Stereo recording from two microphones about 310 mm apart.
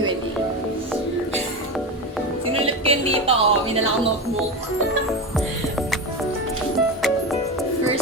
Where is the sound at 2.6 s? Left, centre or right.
Centre.